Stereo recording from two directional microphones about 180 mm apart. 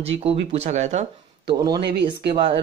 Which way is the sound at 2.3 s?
30° right (ahead or behind).